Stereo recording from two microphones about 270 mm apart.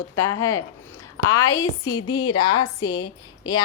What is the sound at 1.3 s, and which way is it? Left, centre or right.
Speech, centre.